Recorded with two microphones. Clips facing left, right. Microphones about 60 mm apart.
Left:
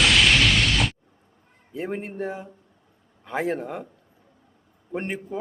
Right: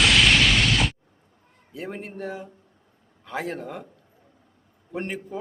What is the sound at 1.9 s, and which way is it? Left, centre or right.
Speech, centre.